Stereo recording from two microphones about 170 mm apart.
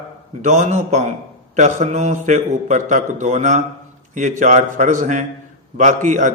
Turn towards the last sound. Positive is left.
turn(degrees=-45)  # may be behind; listen again after turning